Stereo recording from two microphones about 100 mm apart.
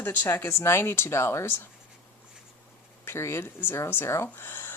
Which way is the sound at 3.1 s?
25° left (ahead or behind).